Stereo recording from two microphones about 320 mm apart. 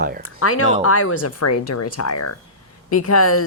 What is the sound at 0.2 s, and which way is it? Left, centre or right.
A woman's voice, left.